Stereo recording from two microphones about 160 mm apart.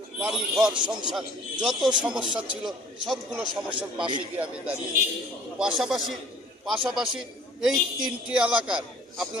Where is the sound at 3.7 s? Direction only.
30° right (ahead or behind).